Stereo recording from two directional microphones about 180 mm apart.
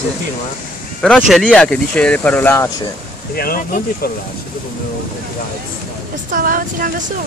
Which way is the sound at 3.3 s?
55° left (ahead or behind).